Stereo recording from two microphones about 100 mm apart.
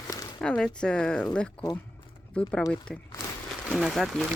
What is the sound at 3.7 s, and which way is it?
Speech, centre (ahead or behind).